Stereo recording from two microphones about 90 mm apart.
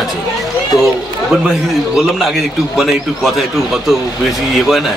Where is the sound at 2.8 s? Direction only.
5° right (ahead or behind).